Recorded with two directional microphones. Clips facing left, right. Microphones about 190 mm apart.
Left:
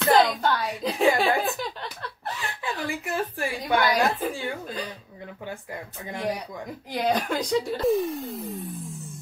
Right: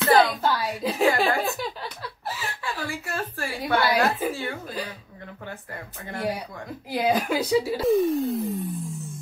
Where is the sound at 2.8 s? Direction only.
15° left (ahead or behind).